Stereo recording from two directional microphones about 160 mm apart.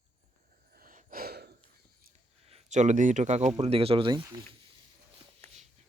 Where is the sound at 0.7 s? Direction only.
60° right (ahead or behind); by 1.5 s 80° right.